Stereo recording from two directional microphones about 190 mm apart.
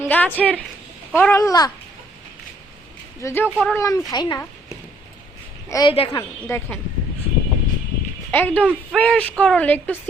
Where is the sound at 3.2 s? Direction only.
15° left (ahead or behind).